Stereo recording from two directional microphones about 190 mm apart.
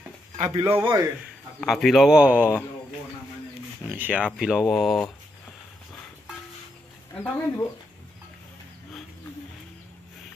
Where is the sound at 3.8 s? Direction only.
10° right (ahead or behind).